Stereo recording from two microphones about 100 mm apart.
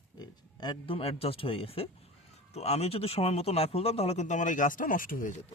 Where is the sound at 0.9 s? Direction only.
75° left (ahead or behind).